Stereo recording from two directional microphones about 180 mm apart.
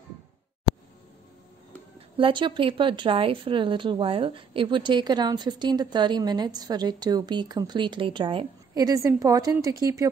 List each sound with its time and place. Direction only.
2.1 s a woman's voice: 30° right (ahead or behind)